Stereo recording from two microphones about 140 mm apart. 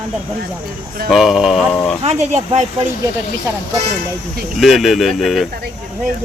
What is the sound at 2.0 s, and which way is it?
Speech, 50° right (ahead or behind).